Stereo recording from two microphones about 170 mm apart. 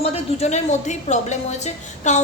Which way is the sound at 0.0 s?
40° left (ahead or behind).